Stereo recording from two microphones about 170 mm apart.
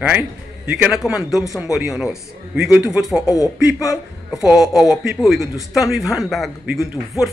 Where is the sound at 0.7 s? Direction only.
5° right (ahead or behind).